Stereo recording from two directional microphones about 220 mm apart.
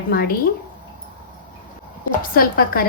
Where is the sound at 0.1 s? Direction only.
45° left (ahead or behind).